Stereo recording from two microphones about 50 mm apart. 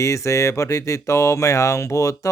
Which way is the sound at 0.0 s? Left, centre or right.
Left.